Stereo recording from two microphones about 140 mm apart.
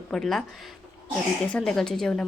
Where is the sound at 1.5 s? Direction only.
5° left (ahead or behind).